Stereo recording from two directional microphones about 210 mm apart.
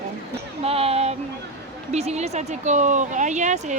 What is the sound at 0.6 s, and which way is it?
Speech, 30° right (ahead or behind).